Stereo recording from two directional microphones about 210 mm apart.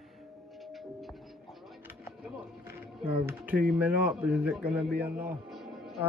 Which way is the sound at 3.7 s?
5° right (ahead or behind).